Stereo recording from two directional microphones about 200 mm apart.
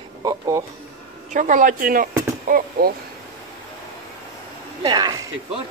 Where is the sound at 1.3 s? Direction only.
40° right (ahead or behind).